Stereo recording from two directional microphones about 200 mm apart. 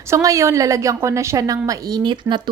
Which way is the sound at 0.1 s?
15° right (ahead or behind).